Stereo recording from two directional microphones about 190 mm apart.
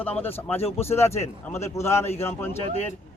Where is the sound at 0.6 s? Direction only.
30° left (ahead or behind).